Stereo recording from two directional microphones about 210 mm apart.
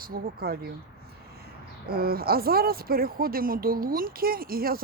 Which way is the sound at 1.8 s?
45° right (ahead or behind).